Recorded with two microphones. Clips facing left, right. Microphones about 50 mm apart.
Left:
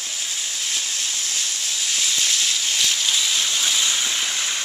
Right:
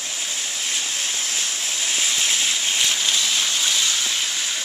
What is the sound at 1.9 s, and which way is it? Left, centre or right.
Rain, centre.